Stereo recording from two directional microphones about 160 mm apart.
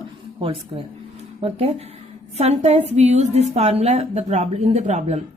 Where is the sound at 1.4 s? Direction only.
40° right (ahead or behind).